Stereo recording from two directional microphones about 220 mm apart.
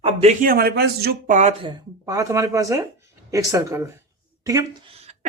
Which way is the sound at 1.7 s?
15° right (ahead or behind).